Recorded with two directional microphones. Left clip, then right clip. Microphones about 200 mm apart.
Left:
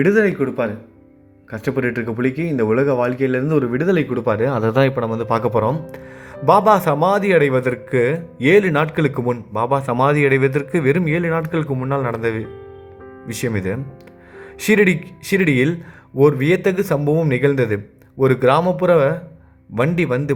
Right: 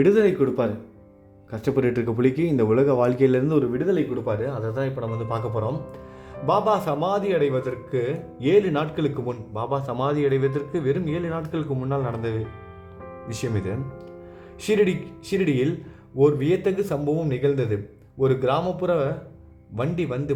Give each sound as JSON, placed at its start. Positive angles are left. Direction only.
{"t": 0.0, "sound": "speech", "side_deg": 0}
{"t": 3.4, "sound": "speech", "side_deg": 5}
{"t": 3.8, "sound": "a man's voice", "side_deg": 20}
{"t": 5.0, "sound": "a man's voice", "side_deg": 20}
{"t": 13.4, "sound": "a man's voice", "side_deg": 10}